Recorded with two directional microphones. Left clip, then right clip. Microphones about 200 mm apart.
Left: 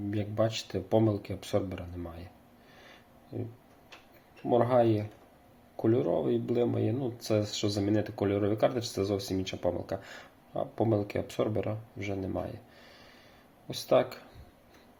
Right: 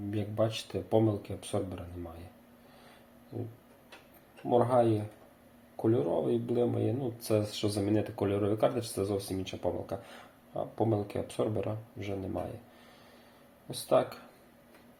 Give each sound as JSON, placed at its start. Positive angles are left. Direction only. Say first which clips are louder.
{"t": 0.1, "sound": "speech", "louder": "left 1 dB", "side_deg": 20}
{"t": 4.4, "sound": "speech", "louder": "left 1 dB", "side_deg": 25}
{"t": 13.7, "sound": "speech", "louder": "left 2 dB", "side_deg": 20}